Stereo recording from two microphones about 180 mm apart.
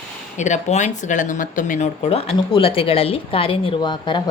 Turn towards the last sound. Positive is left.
turn(degrees=25)  # may be behind; listen again after turning